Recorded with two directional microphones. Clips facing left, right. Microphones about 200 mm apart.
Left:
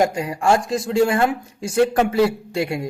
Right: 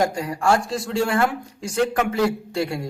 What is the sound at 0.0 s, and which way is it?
Speech, 20° left (ahead or behind).